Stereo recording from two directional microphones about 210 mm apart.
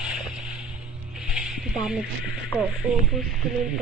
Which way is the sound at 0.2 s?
Centre (ahead or behind).